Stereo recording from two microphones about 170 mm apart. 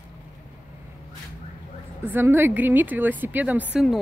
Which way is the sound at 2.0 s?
10° right (ahead or behind).